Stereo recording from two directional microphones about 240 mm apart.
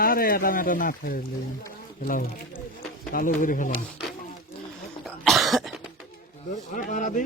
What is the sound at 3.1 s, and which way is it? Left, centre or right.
Speech, left.